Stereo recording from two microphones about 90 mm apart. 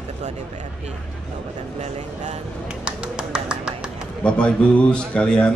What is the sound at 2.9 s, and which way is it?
Bird, 10° right (ahead or behind).